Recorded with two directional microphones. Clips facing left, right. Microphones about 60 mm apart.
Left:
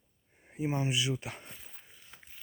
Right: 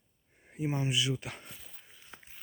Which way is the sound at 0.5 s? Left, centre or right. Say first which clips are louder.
Even; centre.